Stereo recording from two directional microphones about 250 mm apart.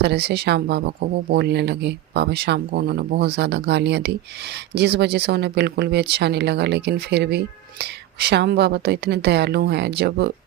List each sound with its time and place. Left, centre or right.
0.0 s speech: right